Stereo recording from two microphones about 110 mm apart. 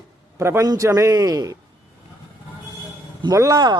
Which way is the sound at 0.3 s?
25° right (ahead or behind).